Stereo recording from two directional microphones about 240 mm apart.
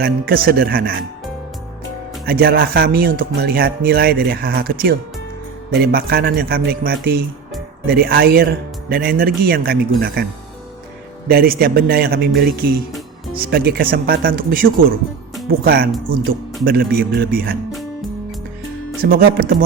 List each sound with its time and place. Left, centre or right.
0.0 s speech: right
2.2 s speech: right
11.3 s speech: right
19.0 s speech: right